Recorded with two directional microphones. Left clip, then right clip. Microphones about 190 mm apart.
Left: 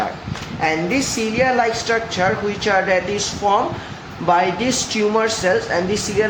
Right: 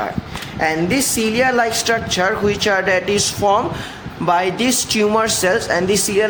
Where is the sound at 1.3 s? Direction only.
60° right (ahead or behind).